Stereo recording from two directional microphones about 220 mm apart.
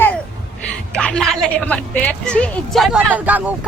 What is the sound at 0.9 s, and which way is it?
A woman's voice, 5° left (ahead or behind).